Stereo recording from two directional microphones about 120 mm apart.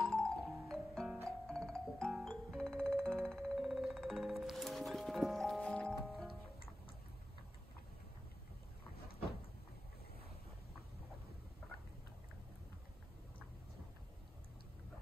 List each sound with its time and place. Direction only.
0.0 s music: centre (ahead or behind)